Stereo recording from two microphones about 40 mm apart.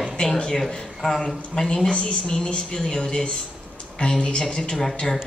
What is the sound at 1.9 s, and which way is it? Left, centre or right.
Speech, left.